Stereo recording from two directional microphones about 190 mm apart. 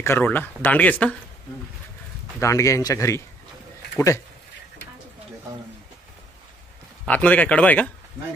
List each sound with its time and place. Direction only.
0.0 s speech: 10° left (ahead or behind)
2.4 s speech: 15° left (ahead or behind)
7.1 s speech: 5° left (ahead or behind)